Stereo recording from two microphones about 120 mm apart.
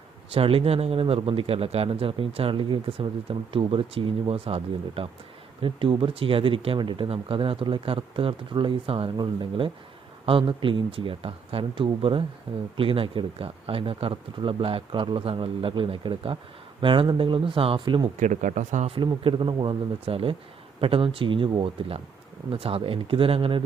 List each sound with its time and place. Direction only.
0.3 s a man's voice: 50° right (ahead or behind)
18.2 s speech: 90° right
18.9 s a man's voice: 45° right (ahead or behind)